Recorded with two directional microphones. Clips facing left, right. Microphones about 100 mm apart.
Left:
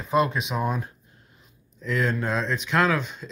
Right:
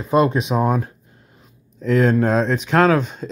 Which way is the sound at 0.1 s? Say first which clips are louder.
Right 6 dB; 30° right (ahead or behind).